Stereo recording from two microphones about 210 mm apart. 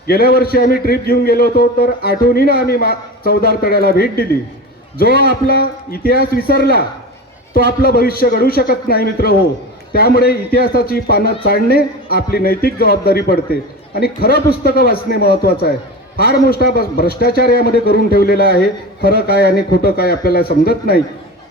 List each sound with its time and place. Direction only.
0.1 s a man's voice: 45° left (ahead or behind)
5.3 s a man's voice: 45° left (ahead or behind)